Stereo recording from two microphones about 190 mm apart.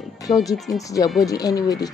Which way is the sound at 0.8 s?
20° left (ahead or behind).